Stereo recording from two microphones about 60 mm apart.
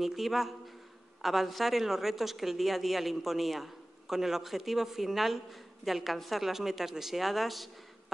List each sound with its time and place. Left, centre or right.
0.0 s a woman's voice: centre